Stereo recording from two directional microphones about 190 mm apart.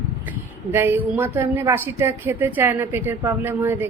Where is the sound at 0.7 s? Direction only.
10° right (ahead or behind).